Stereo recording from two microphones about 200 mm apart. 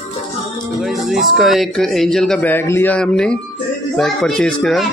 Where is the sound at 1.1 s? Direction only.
Centre (ahead or behind).